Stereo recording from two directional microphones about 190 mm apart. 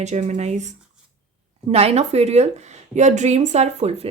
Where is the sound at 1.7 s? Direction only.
35° right (ahead or behind).